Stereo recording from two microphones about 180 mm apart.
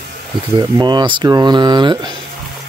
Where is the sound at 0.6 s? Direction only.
25° right (ahead or behind).